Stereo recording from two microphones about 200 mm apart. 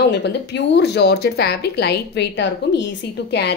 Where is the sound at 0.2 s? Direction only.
60° left (ahead or behind).